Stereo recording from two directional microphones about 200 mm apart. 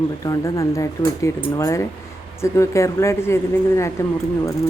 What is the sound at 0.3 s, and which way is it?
Speech, 20° left (ahead or behind).